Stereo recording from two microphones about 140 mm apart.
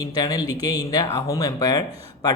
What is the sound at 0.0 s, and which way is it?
Speech, 25° left (ahead or behind).